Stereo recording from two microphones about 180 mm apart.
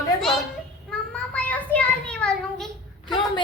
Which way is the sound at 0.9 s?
5° left (ahead or behind).